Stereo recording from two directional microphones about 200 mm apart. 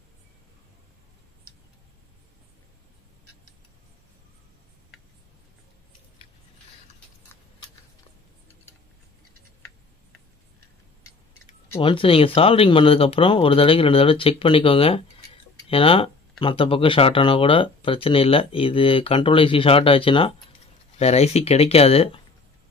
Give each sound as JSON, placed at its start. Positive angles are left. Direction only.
{"t": 11.8, "sound": "speech", "side_deg": 25}